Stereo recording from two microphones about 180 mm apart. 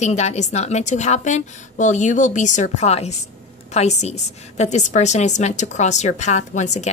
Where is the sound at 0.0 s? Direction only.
40° left (ahead or behind).